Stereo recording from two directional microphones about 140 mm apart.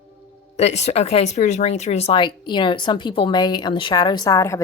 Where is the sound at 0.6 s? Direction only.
50° left (ahead or behind).